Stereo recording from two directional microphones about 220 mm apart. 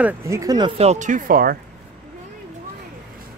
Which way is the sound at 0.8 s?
30° right (ahead or behind).